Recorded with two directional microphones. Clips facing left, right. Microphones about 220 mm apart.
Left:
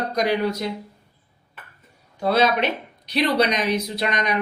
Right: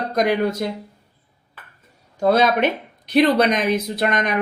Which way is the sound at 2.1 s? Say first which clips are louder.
Right 3 dB; 45° right (ahead or behind).